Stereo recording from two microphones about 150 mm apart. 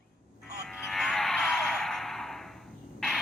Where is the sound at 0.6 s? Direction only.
Centre (ahead or behind).